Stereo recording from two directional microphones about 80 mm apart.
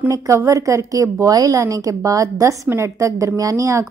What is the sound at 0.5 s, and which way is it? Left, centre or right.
A woman's voice, right.